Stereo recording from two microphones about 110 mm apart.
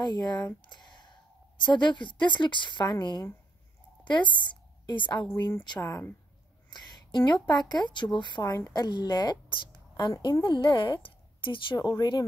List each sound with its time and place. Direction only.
0.0 s speech: 40° left (ahead or behind)
0.7 s a sound: 45° left (ahead or behind)
1.6 s a woman's voice: 45° left (ahead or behind)
5.8 s speech: 30° left (ahead or behind)
6.7 s a woman's voice: 45° left (ahead or behind)